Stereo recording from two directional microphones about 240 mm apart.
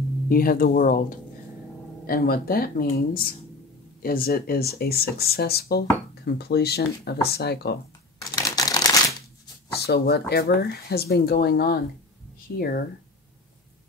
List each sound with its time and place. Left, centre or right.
0.3 s speech: left
8.4 s typewriter: centre
9.8 s speech: left